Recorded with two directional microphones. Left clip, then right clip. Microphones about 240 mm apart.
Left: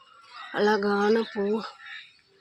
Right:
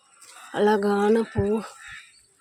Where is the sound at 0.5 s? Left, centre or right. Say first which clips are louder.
Right 2 dB; right.